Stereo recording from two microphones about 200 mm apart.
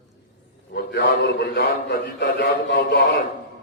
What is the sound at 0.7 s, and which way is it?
A man's voice, 55° left (ahead or behind).